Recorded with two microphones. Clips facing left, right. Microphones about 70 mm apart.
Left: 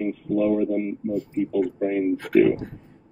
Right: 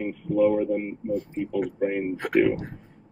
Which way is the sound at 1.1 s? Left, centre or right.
Right.